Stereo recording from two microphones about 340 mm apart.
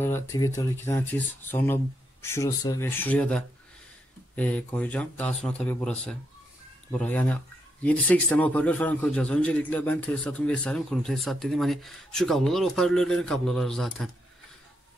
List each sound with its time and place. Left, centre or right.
0.0 s a man's voice: centre